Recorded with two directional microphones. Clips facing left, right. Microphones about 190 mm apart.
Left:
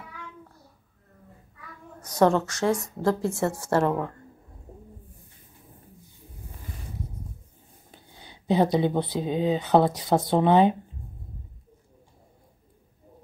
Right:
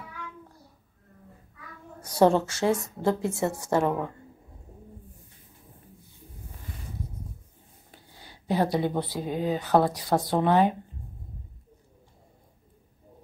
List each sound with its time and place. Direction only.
2.0 s a woman's voice: 30° right (ahead or behind)
3.6 s a woman's voice: 5° right (ahead or behind)
8.2 s speech: 20° left (ahead or behind)